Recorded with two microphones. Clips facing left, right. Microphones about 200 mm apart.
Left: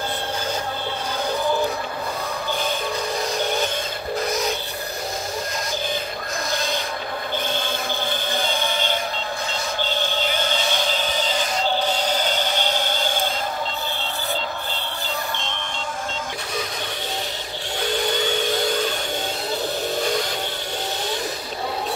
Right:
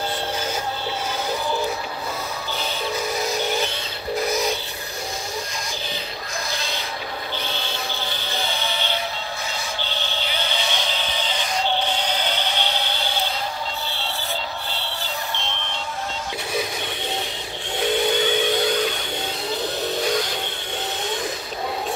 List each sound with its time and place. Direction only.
7.5 s music: 50° left (ahead or behind)